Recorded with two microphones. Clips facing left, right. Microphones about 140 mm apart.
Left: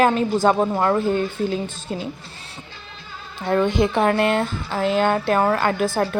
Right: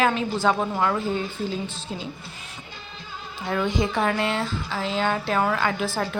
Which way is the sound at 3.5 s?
55° left (ahead or behind).